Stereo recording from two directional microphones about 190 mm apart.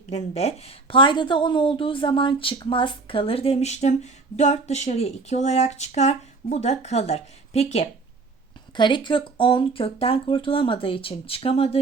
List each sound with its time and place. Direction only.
0.1 s a woman's voice: 35° left (ahead or behind)